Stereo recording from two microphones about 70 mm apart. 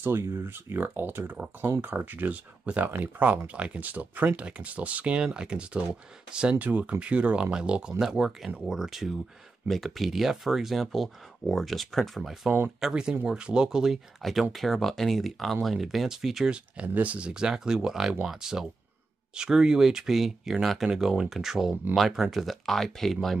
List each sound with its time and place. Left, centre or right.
0.0 s speech: right; by 16.5 s centre
16.5 s speech: centre